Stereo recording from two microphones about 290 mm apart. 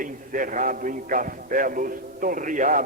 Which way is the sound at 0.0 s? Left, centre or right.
Right.